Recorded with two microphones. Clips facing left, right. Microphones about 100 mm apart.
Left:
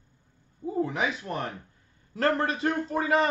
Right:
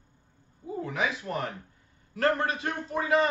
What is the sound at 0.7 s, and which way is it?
Speech, 25° left (ahead or behind).